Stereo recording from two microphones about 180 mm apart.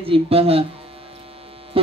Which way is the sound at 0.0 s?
30° right (ahead or behind).